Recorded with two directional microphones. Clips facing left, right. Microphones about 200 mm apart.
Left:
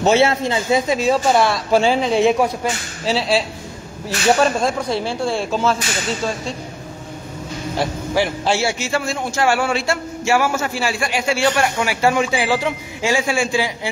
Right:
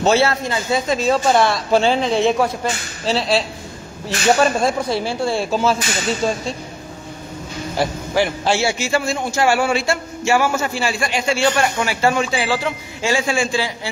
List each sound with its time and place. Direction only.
0.0 s a man's voice: 20° left (ahead or behind)
4.4 s a man's voice: 5° right (ahead or behind)
8.1 s a man's voice: centre (ahead or behind)